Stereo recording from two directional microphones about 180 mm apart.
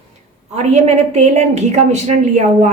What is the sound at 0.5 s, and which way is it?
A woman's voice, 35° right (ahead or behind).